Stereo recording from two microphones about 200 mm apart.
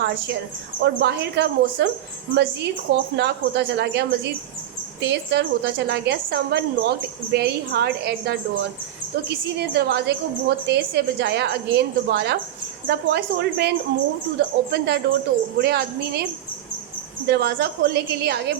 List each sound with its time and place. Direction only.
0.8 s a woman's voice: 55° right (ahead or behind)
9.6 s a woman's voice: 55° right (ahead or behind)
17.2 s a woman's voice: 55° right (ahead or behind)